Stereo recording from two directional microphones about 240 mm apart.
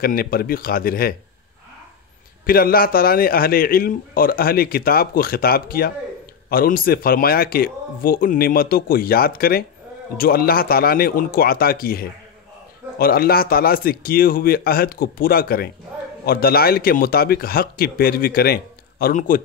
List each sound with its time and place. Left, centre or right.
0.0 s a man's voice: left
2.4 s a man's voice: left